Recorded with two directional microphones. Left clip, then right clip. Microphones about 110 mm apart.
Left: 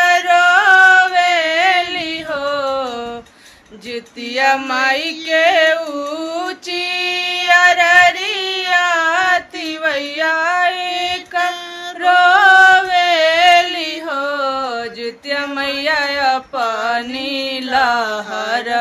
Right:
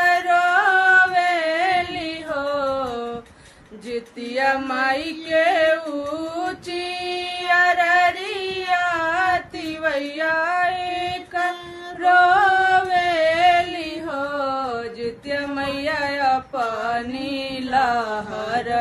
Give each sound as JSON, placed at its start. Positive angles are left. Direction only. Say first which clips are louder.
{"t": 0.0, "sound": "music", "louder": "left 6 dB", "side_deg": 15}
{"t": 3.9, "sound": "female singing", "louder": "left 4 dB", "side_deg": 15}
{"t": 12.0, "sound": "music", "louder": "left 5 dB", "side_deg": 15}